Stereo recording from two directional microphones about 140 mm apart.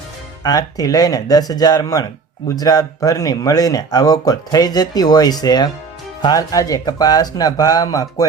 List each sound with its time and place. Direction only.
0.4 s speech: 25° left (ahead or behind)